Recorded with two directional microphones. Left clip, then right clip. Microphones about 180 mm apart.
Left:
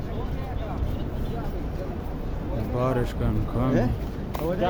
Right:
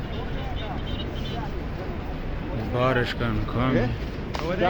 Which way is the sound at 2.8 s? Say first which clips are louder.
Right 4 dB; 15° left (ahead or behind).